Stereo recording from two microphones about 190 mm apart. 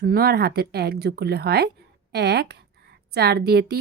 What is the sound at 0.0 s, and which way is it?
A woman's voice, 55° right (ahead or behind).